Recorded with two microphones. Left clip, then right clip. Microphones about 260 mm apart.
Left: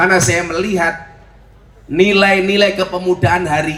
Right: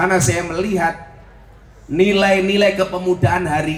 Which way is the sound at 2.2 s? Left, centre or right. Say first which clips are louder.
Left 2 dB; centre.